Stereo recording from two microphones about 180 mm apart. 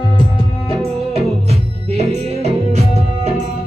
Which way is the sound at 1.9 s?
40° right (ahead or behind).